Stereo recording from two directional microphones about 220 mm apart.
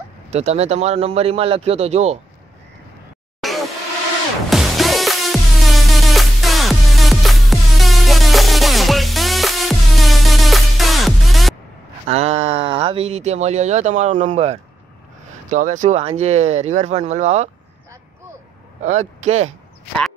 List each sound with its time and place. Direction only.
0.3 s a man's voice: 30° right (ahead or behind)
3.3 s a sound: centre (ahead or behind)
4.5 s music: centre (ahead or behind)
12.1 s speech: 30° right (ahead or behind)
18.8 s speech: 30° right (ahead or behind)